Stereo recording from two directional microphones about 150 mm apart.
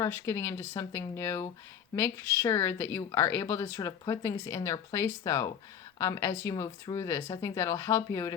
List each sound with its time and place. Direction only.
0.0 s a woman's voice: 15° left (ahead or behind)